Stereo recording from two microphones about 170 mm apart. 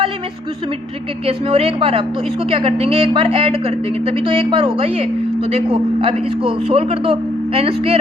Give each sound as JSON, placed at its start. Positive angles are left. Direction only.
{"t": 1.3, "sound": "speech", "side_deg": -35}